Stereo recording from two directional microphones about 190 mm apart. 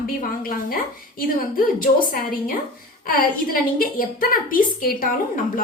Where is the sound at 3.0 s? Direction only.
50° left (ahead or behind).